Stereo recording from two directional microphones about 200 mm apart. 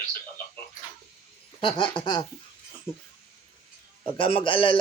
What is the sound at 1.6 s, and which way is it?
Speech, 25° left (ahead or behind).